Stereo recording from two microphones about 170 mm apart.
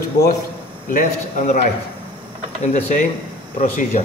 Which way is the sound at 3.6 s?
45° left (ahead or behind).